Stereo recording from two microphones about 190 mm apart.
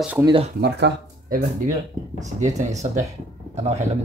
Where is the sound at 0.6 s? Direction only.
60° right (ahead or behind).